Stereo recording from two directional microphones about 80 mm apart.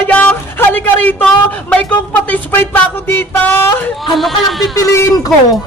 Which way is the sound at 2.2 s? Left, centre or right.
Centre.